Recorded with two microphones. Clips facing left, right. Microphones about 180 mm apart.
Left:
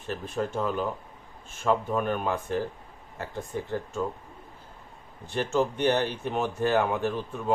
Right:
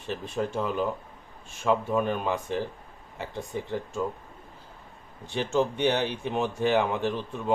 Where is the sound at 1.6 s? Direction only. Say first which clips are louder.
Right 1 dB; centre (ahead or behind).